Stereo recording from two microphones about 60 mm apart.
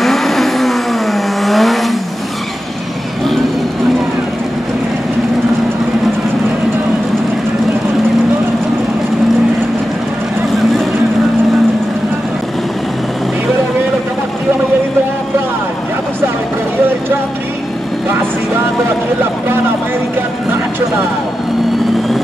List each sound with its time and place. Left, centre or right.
0.0 s vehicle: centre